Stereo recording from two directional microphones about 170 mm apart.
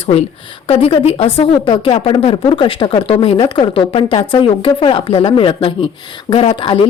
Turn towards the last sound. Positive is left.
turn(degrees=30)  # may be behind; listen again after turning